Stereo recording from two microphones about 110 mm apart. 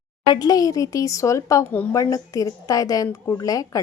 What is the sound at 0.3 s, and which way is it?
A woman's voice, 35° left (ahead or behind).